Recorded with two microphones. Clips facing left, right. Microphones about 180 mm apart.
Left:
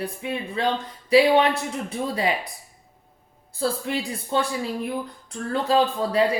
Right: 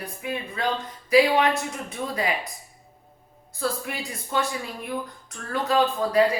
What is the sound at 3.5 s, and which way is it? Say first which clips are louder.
Speech: left 3 dB; 30° left (ahead or behind).